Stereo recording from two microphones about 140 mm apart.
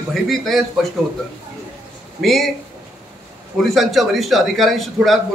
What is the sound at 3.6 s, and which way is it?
A man's voice, centre (ahead or behind).